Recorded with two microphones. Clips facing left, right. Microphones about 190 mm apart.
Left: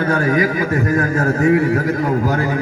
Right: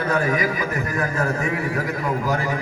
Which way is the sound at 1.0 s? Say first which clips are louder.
Left 7 dB; 40° left (ahead or behind).